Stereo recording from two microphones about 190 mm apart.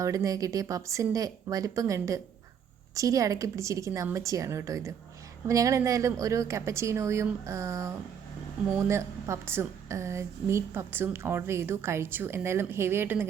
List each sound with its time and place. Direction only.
0.0 s a woman's voice: 15° right (ahead or behind)